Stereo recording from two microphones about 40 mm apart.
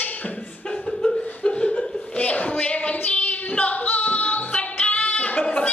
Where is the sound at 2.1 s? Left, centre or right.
Left.